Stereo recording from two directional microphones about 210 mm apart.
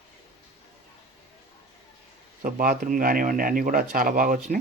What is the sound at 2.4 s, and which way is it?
Speech, 40° right (ahead or behind).